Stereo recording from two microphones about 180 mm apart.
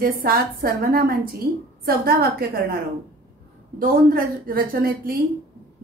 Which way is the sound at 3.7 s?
55° right (ahead or behind).